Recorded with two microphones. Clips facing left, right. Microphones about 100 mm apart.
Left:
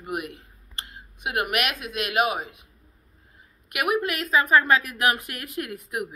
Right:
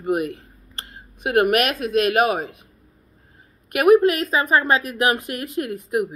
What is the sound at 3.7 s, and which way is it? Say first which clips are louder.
A woman's voice: right 11 dB; 35° right (ahead or behind).